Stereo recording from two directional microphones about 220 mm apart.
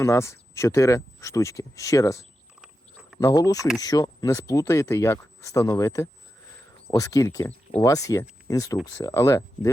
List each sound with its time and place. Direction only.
0.0 s speech: 15° left (ahead or behind)